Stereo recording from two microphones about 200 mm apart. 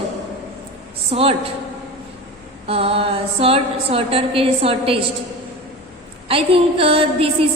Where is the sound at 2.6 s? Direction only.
30° right (ahead or behind).